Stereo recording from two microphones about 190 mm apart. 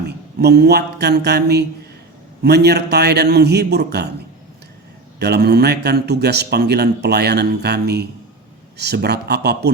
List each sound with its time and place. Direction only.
0.1 s a man's voice: 60° right (ahead or behind)
5.2 s a man's voice: 60° right (ahead or behind)